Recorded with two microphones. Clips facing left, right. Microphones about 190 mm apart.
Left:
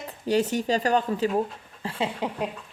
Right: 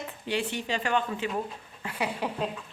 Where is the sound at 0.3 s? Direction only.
40° left (ahead or behind).